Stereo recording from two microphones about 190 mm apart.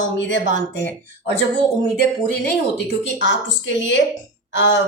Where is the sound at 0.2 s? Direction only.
70° left (ahead or behind).